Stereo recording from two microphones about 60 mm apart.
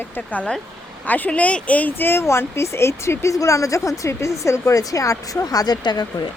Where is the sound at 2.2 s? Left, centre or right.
Left.